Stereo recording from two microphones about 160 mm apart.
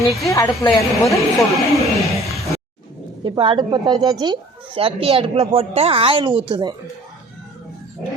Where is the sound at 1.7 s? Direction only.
Centre (ahead or behind).